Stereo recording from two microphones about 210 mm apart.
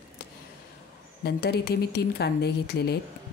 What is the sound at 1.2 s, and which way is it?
Speech, 50° left (ahead or behind).